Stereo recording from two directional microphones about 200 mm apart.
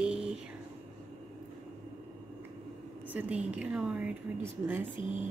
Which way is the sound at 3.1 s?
5° right (ahead or behind).